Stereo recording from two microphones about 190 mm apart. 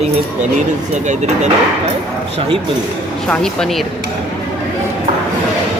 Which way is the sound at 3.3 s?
5° left (ahead or behind).